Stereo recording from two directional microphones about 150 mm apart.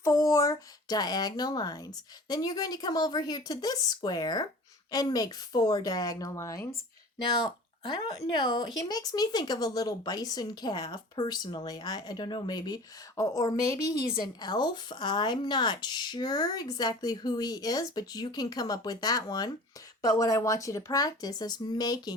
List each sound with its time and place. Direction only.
0.0 s speech: 20° left (ahead or behind)